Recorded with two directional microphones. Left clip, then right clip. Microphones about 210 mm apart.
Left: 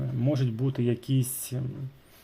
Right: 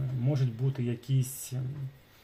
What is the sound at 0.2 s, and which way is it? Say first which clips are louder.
Speech: left 6 dB; 40° left (ahead or behind).